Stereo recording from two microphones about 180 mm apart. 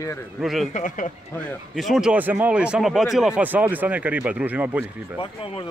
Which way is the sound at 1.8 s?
Centre (ahead or behind).